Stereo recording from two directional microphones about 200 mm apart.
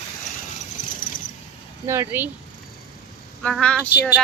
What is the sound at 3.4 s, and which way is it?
Speech, 5° left (ahead or behind).